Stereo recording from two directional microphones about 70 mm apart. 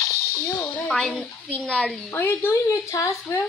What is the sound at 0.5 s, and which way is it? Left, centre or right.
Speech, centre.